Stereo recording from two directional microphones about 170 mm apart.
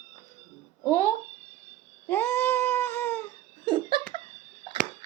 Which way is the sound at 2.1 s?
10° left (ahead or behind).